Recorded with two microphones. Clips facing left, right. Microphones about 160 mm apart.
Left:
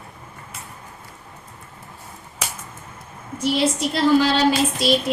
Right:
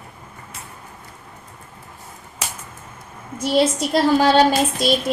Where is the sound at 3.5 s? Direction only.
45° right (ahead or behind).